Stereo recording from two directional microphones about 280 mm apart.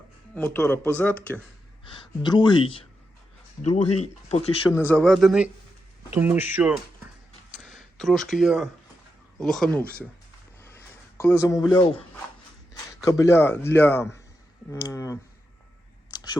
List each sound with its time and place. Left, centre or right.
0.3 s a man's voice: centre
1.8 s speech: centre
4.7 s speech: centre
7.6 s a sound: centre
9.4 s speech: centre
10.6 s a sound: centre
13.1 s a man's voice: centre